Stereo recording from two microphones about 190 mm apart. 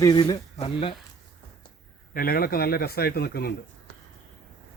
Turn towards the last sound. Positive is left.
turn(degrees=55)  # may be behind; listen again after turning